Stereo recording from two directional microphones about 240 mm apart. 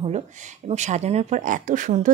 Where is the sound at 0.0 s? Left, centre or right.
Right.